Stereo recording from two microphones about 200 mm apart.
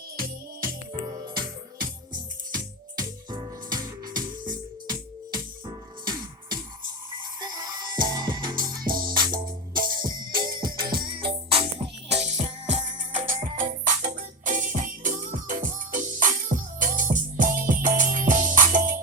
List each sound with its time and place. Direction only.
1.0 s music: 20° right (ahead or behind)
3.0 s music: 20° right (ahead or behind)
12.7 s music: 40° right (ahead or behind)